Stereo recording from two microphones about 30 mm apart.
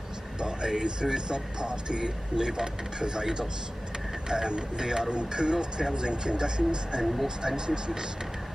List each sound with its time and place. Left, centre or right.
0.4 s speech: right